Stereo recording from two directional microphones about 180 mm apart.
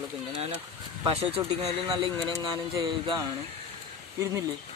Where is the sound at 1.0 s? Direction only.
35° right (ahead or behind).